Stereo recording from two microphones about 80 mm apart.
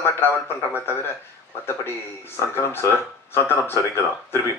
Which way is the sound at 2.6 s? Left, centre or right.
Left.